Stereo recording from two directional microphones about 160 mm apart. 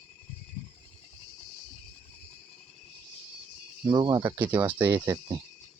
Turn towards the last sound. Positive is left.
turn(degrees=-15)  # may be behind; listen again after turning